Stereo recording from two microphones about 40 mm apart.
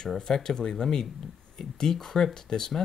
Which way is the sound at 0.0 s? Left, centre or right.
Centre.